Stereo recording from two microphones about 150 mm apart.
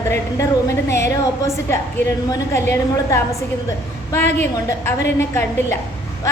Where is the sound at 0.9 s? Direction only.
20° left (ahead or behind).